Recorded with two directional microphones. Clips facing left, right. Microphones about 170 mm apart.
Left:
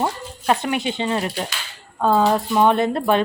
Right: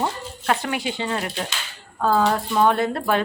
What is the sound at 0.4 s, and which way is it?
Speech, 20° left (ahead or behind).